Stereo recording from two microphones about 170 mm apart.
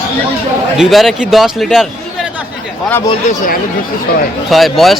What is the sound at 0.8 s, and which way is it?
Speech, centre (ahead or behind).